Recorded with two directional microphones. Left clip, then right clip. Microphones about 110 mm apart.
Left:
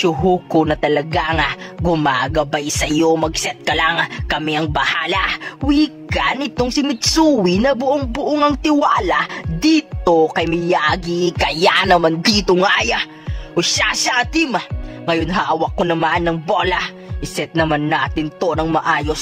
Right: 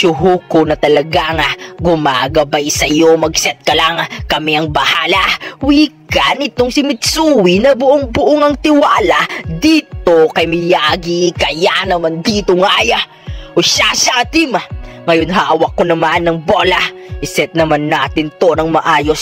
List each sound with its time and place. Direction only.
0.0 s speech: 25° right (ahead or behind); by 8.4 s 45° right (ahead or behind)
8.6 s music: 45° right (ahead or behind)
9.6 s music: 25° right (ahead or behind)
10.3 s speech: 40° right (ahead or behind)
11.0 s music: 20° right (ahead or behind)
11.6 s music: 10° right (ahead or behind)
11.9 s speech: 5° left (ahead or behind)
12.6 s speech: 35° right (ahead or behind)
18.8 s music: 50° right (ahead or behind)